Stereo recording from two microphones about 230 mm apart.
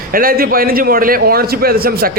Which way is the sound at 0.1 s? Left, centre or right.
Right.